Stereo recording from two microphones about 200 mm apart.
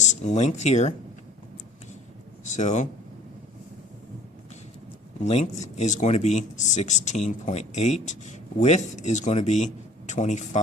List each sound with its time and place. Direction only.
0.0 s speech: 35° left (ahead or behind)
2.4 s speech: 35° left (ahead or behind)
5.2 s speech: 35° left (ahead or behind)